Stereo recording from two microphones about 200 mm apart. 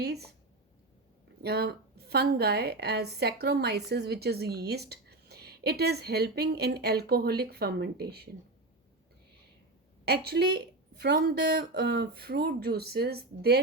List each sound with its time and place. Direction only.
0.0 s a sound: 55° right (ahead or behind)
1.4 s a woman's voice: 50° right (ahead or behind)
10.1 s a woman's voice: 55° right (ahead or behind)